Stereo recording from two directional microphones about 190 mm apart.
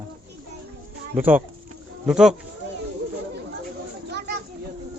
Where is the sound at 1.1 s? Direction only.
10° right (ahead or behind).